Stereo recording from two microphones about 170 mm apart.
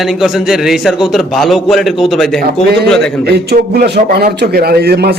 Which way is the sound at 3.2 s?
70° right (ahead or behind).